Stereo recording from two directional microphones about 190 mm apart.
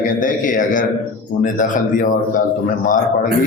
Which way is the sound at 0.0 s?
45° left (ahead or behind).